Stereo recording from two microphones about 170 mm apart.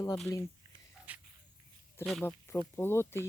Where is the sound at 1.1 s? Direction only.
10° right (ahead or behind).